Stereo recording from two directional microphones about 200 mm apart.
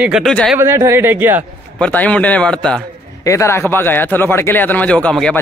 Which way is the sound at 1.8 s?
5° left (ahead or behind).